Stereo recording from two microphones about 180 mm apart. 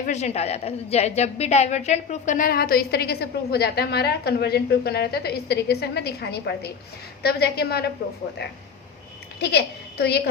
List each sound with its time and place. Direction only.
0.0 s a woman's voice: 40° left (ahead or behind); by 7.9 s 60° left (ahead or behind)
9.4 s a woman's voice: 65° left (ahead or behind)